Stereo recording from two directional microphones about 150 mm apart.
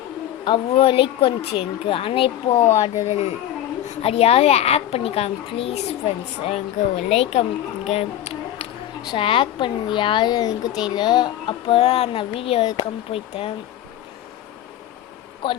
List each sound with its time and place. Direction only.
0.4 s a woman's voice: 35° left (ahead or behind)
11.6 s speech: 40° left (ahead or behind)